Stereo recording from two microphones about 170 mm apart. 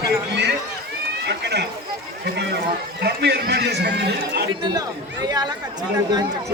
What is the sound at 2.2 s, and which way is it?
A man's voice, 80° right.